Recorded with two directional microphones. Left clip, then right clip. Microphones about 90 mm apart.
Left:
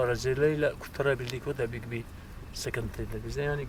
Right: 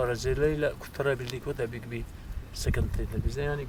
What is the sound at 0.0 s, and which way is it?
Speech, centre (ahead or behind).